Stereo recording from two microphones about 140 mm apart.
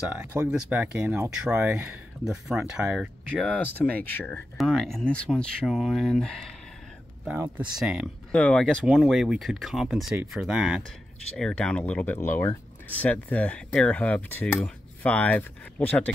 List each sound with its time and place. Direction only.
0.1 s speech: 15° right (ahead or behind)
0.5 s speech: 5° right (ahead or behind)
3.4 s speech: 10° left (ahead or behind)
4.6 s speech: centre (ahead or behind)
7.2 s speech: 10° right (ahead or behind)
11.3 s speech: 5° left (ahead or behind)